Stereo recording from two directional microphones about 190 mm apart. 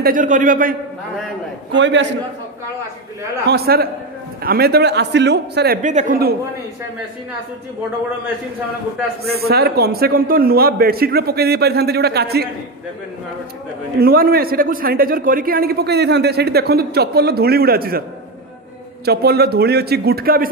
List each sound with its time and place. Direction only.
0.0 s a man's voice: 45° right (ahead or behind)
1.7 s a man's voice: 70° right (ahead or behind)
3.4 s a man's voice: 55° right (ahead or behind)
5.8 s speech: 40° right (ahead or behind)
9.2 s a man's voice: 55° right (ahead or behind)
13.9 s a man's voice: 50° right (ahead or behind)
19.0 s a man's voice: 55° right (ahead or behind)